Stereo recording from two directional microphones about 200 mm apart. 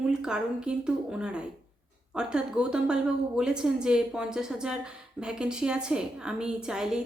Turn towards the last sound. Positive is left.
turn(degrees=-5)  # may be behind; listen again after turning